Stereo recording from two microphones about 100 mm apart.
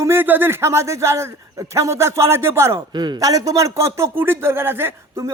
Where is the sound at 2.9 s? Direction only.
45° right (ahead or behind).